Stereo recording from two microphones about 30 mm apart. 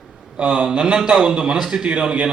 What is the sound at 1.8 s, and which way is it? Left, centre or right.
Speech, right.